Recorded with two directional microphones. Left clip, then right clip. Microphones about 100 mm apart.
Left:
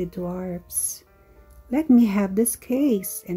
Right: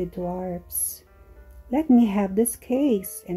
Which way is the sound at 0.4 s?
25° left (ahead or behind).